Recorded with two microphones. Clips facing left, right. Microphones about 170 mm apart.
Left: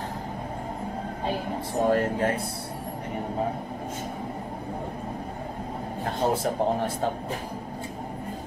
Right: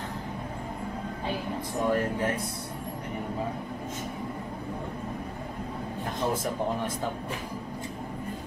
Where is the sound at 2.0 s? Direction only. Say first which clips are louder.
Left 3 dB; 30° left (ahead or behind).